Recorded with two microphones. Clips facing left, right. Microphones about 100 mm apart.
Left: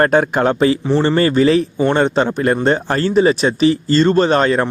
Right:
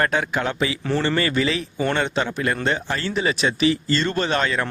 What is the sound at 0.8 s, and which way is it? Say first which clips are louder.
Speech: left 7 dB; 30° left (ahead or behind).